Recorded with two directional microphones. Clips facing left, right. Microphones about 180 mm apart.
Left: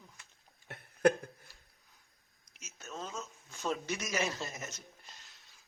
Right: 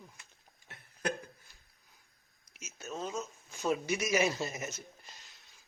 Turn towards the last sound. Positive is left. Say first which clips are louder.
# right 4 dB
turn(degrees=-10)  # may be behind; listen again after turning